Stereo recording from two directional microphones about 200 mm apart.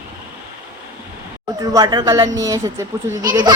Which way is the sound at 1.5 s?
20° right (ahead or behind).